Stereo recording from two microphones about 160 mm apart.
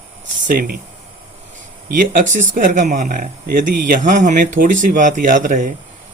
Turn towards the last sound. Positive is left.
turn(degrees=-55)  # may be behind; listen again after turning